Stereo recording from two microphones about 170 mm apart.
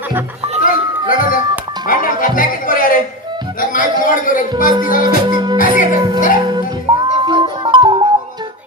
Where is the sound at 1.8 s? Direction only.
55° left (ahead or behind).